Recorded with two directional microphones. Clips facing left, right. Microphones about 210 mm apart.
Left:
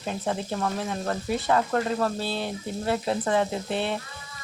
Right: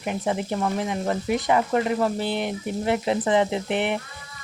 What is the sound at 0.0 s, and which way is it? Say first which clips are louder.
Speech: right 3 dB; 15° right (ahead or behind).